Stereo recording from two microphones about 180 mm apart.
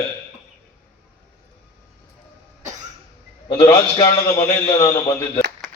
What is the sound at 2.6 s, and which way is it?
Cough, 40° right (ahead or behind).